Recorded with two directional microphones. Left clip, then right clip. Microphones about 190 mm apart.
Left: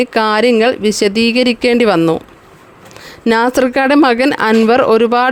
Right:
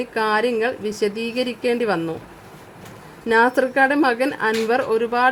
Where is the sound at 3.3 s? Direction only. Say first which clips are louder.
Left 5 dB; 50° left (ahead or behind).